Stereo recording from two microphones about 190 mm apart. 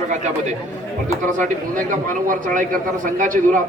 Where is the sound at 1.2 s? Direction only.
45° right (ahead or behind).